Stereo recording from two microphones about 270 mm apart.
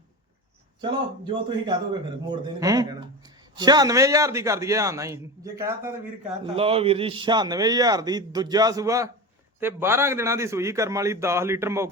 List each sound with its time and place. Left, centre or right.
0.8 s a man's voice: centre
6.6 s a man's voice: right